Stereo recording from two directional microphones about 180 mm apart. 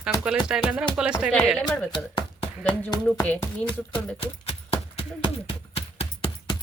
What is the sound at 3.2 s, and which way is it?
Speech, 10° left (ahead or behind).